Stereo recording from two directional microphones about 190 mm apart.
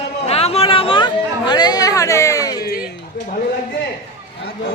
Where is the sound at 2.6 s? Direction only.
55° left (ahead or behind).